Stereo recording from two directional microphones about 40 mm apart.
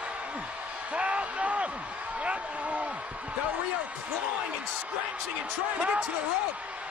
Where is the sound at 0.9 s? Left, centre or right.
Right.